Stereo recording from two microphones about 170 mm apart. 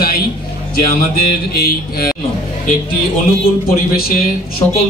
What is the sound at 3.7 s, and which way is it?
Speech, 60° left (ahead or behind).